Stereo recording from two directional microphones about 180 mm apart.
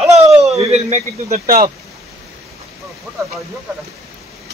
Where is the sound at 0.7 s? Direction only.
40° right (ahead or behind).